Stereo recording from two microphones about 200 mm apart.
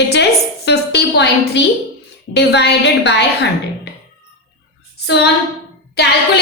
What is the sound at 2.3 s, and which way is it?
Speech, 55° left (ahead or behind).